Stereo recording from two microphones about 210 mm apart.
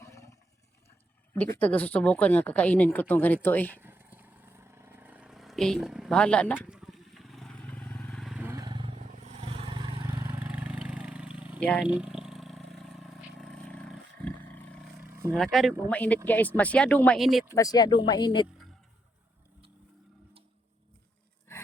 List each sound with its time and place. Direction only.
0.0 s roar: 15° left (ahead or behind)
1.5 s speech: 5° left (ahead or behind)
3.8 s vehicle: 10° right (ahead or behind)
9.0 s vehicle: 35° right (ahead or behind); by 14.8 s 5° left (ahead or behind)
15.3 s speech: centre (ahead or behind)
17.5 s speech: 15° left (ahead or behind)